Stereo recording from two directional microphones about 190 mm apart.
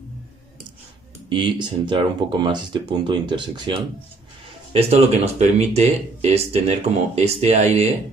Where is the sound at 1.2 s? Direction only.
25° right (ahead or behind).